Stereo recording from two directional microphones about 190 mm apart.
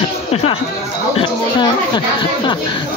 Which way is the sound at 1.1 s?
25° left (ahead or behind).